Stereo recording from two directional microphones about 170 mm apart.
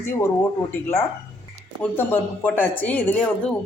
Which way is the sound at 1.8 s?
10° left (ahead or behind).